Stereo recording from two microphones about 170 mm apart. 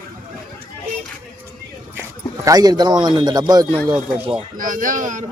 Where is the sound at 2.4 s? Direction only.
20° right (ahead or behind).